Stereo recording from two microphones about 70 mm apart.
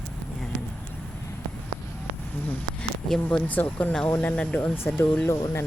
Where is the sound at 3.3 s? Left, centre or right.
Left.